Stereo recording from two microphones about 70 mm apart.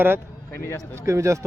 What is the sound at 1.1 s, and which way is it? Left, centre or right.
Speech, right.